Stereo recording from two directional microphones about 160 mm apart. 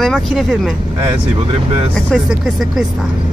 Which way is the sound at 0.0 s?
Centre (ahead or behind).